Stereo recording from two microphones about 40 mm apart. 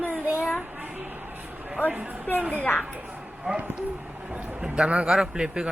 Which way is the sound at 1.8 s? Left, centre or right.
Right.